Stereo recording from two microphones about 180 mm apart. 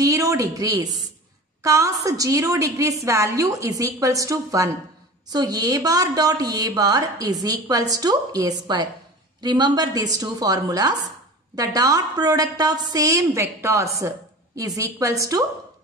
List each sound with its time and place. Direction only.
0.0 s a woman's voice: 20° right (ahead or behind)